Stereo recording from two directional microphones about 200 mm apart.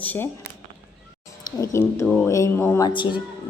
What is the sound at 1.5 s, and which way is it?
A woman's voice, 15° left (ahead or behind).